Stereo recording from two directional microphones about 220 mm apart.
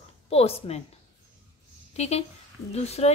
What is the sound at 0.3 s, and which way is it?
Speech, 25° left (ahead or behind).